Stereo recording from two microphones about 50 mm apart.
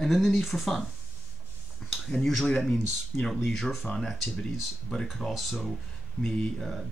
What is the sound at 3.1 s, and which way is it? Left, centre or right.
Speech, left.